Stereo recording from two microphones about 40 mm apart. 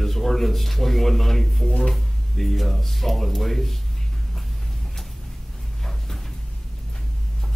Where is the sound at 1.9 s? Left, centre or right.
Centre.